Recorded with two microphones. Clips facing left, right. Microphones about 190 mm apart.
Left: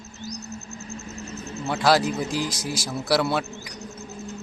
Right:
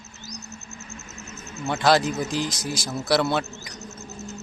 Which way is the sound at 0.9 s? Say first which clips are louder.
Left 7 dB; 35° left (ahead or behind).